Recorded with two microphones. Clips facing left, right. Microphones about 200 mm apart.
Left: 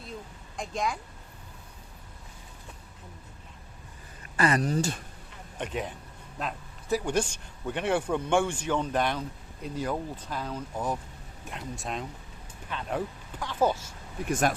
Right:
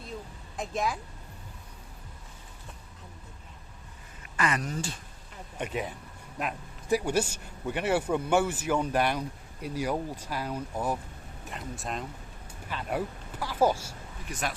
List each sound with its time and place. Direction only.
0.5 s speech: 5° right (ahead or behind)
4.4 s speech: 35° left (ahead or behind)
5.5 s speech: 5° right (ahead or behind)
14.3 s speech: 50° left (ahead or behind)